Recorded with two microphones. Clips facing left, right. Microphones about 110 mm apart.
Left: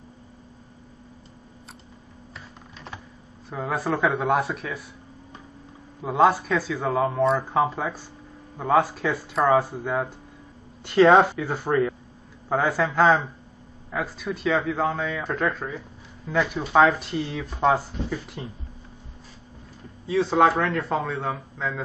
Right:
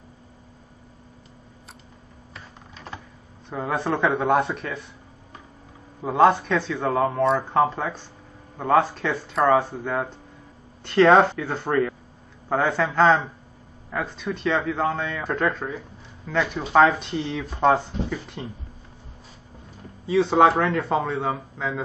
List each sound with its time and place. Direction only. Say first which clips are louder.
2.3 s typing: right 1 dB; centre (ahead or behind)
3.4 s speech: right 1 dB; centre (ahead or behind)
6.0 s speech: right 2 dB; centre (ahead or behind)
20.1 s speech: right 2 dB; centre (ahead or behind)